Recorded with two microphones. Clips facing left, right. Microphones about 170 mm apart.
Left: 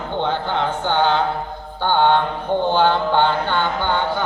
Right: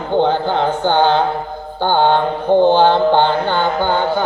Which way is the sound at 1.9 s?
30° right (ahead or behind).